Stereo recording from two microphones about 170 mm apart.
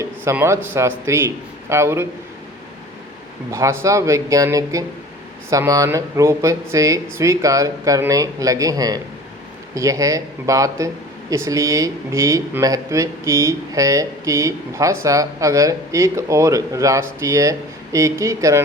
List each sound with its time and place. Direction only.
0.0 s speech: 15° right (ahead or behind)
3.5 s speech: 15° right (ahead or behind)